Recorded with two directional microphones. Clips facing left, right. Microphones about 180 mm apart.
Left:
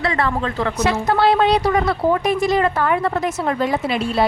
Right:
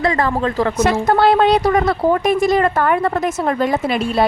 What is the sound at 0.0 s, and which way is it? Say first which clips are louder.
Speech: right 3 dB; 40° right (ahead or behind).